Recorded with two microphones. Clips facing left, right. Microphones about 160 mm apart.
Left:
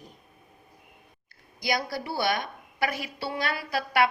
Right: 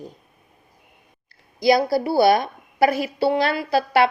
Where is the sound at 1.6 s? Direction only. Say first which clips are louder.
Right 12 dB; 30° right (ahead or behind).